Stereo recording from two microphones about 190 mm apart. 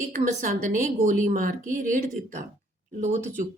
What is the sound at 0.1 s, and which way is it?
A woman's voice, 45° right (ahead or behind).